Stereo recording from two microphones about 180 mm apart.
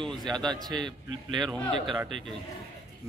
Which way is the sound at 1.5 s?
5° left (ahead or behind).